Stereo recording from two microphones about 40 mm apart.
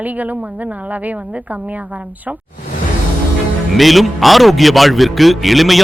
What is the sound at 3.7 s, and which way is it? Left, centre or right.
Speech, centre.